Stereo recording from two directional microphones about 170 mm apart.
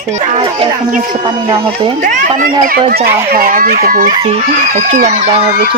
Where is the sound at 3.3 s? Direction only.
55° right (ahead or behind).